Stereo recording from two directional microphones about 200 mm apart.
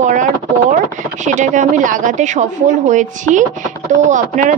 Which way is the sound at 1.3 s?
40° right (ahead or behind).